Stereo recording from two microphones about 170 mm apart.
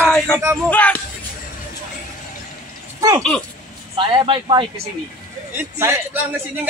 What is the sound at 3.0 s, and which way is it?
Speech, 20° right (ahead or behind).